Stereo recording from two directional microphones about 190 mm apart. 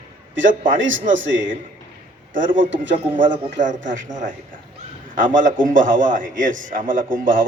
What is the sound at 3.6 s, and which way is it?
A man's voice, 40° right (ahead or behind).